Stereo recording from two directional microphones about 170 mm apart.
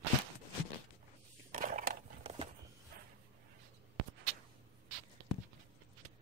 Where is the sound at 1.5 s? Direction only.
50° right (ahead or behind).